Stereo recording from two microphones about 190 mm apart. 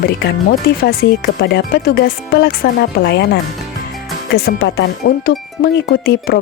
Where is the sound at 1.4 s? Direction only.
60° left (ahead or behind).